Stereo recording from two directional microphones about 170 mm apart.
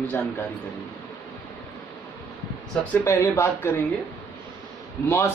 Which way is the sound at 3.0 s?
15° left (ahead or behind).